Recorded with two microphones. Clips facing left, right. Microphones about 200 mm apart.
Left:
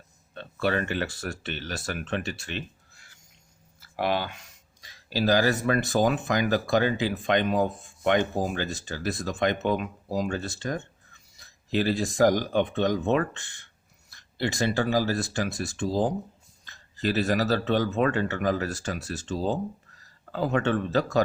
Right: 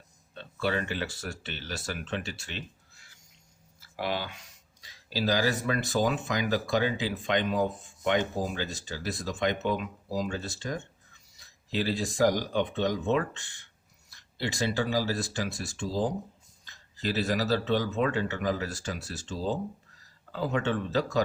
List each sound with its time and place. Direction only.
0.3 s speech: 55° left (ahead or behind)